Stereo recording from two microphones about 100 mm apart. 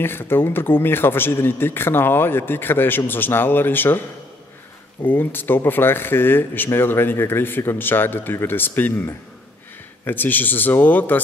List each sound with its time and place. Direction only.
0.0 s speech: 20° left (ahead or behind)
5.0 s speech: 20° left (ahead or behind)